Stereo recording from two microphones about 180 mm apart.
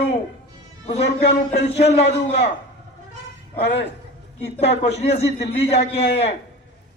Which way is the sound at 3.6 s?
35° left (ahead or behind).